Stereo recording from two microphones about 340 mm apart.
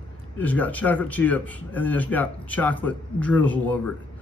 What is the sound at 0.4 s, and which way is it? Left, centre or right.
Speech, centre.